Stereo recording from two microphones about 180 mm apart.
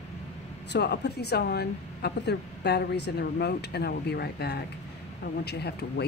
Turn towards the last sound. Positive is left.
turn(degrees=65)  # may be behind; listen again after turning